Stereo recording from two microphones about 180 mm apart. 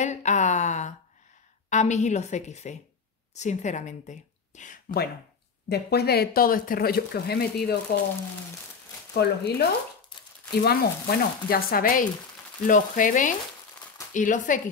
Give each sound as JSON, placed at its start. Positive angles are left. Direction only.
{"t": 0.0, "sound": "a woman's voice", "side_deg": 40}
{"t": 9.1, "sound": "speech", "side_deg": 65}